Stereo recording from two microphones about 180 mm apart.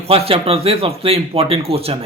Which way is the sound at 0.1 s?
30° right (ahead or behind).